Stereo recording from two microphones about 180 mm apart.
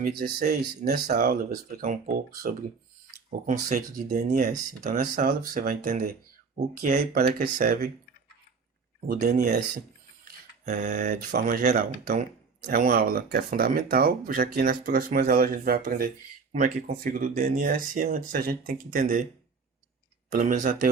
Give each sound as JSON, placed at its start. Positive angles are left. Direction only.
{"t": 0.2, "sound": "speech", "side_deg": -60}
{"t": 9.0, "sound": "speech", "side_deg": -45}
{"t": 10.2, "sound": "a sound", "side_deg": -40}
{"t": 11.3, "sound": "speech", "side_deg": -55}
{"t": 20.3, "sound": "speech", "side_deg": -45}